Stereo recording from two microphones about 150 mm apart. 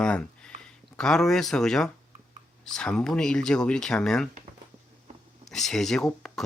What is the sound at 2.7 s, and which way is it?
Speech, 5° left (ahead or behind).